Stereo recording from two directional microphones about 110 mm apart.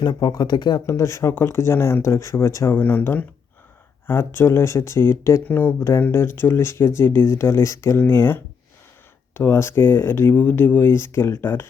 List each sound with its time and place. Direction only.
0.0 s speech: 40° left (ahead or behind)
0.9 s speech: 25° left (ahead or behind)